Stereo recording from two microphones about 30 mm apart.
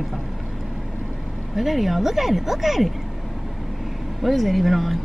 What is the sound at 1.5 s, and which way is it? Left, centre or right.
Speech, centre.